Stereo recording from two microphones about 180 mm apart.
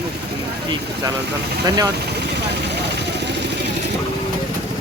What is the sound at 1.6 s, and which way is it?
Speech, 20° right (ahead or behind).